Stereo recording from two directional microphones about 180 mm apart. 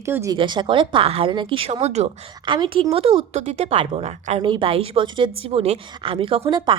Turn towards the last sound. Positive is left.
turn(degrees=-25)  # may be behind; listen again after turning